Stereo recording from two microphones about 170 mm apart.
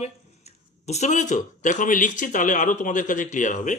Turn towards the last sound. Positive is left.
turn(degrees=50)  # may be behind; listen again after turning